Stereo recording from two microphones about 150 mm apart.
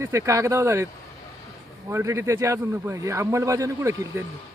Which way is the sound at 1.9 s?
20° right (ahead or behind).